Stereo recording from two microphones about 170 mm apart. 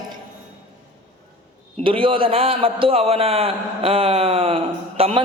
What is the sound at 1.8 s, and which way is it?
A man's voice, 30° right (ahead or behind).